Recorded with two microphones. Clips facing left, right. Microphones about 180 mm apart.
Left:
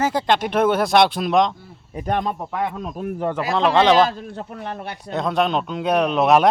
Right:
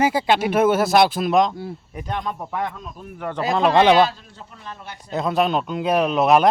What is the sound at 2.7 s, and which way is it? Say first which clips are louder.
Speech: left 9 dB; 70° left (ahead or behind).